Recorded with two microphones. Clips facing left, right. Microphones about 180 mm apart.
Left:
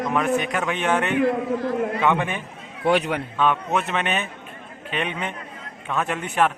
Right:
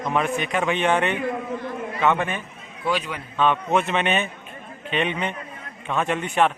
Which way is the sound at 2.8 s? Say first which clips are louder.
Left 5 dB; 65° left (ahead or behind).